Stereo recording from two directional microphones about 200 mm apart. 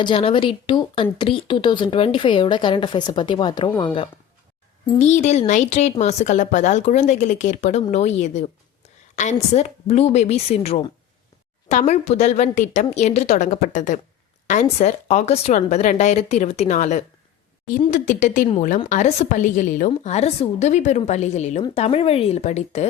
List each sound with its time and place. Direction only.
0.0 s speech: 25° left (ahead or behind)
4.9 s a woman's voice: 35° left (ahead or behind)